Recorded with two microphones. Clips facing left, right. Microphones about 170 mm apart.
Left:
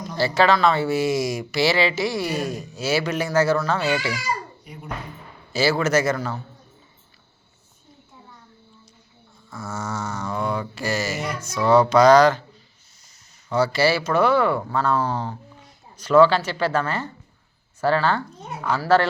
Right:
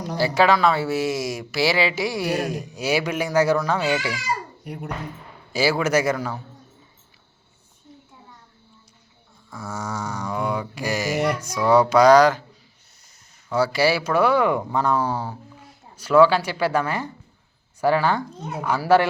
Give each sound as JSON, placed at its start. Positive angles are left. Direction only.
{"t": 0.2, "sound": "speech", "side_deg": -10}
{"t": 4.6, "sound": "speech", "side_deg": -70}
{"t": 5.5, "sound": "speech", "side_deg": -10}
{"t": 9.5, "sound": "speech", "side_deg": -10}
{"t": 13.5, "sound": "speech", "side_deg": -10}